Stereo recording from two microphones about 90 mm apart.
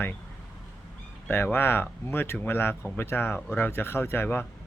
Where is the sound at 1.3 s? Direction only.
25° left (ahead or behind).